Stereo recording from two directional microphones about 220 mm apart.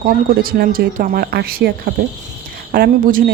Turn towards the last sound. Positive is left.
turn(degrees=-40)  # may be behind; listen again after turning